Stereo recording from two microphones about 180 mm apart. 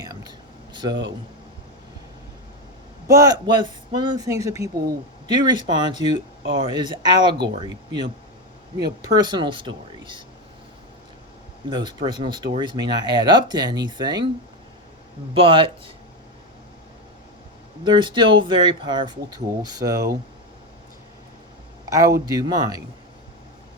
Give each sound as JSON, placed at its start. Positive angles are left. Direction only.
{"t": 0.0, "sound": "a sound", "side_deg": -20}
{"t": 3.1, "sound": "speech", "side_deg": -20}
{"t": 11.7, "sound": "speech", "side_deg": -25}
{"t": 15.3, "sound": "speech", "side_deg": -30}
{"t": 17.8, "sound": "speech", "side_deg": -25}
{"t": 21.8, "sound": "speech", "side_deg": -15}